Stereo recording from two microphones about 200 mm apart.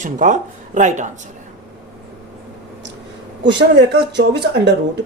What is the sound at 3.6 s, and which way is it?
Speech, 55° right (ahead or behind).